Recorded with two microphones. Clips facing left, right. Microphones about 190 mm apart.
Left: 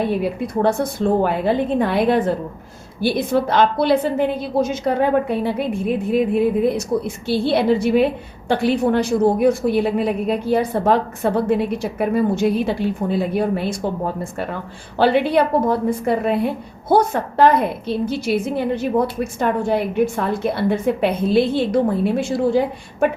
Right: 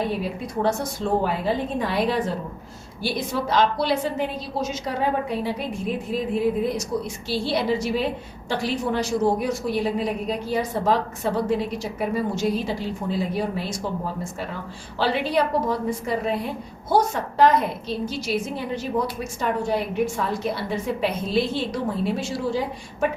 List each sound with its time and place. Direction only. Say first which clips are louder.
0.2 s a woman's voice: left 6 dB; 55° left (ahead or behind)